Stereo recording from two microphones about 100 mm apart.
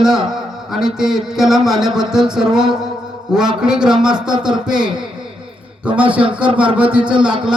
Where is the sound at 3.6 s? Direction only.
5° right (ahead or behind).